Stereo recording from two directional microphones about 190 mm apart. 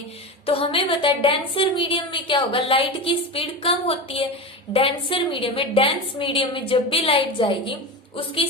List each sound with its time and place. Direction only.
0.4 s a woman's voice: 30° left (ahead or behind)